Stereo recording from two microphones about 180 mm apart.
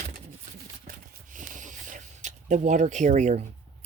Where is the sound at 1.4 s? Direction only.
45° right (ahead or behind).